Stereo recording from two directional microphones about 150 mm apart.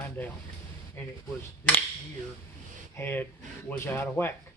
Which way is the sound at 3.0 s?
15° left (ahead or behind).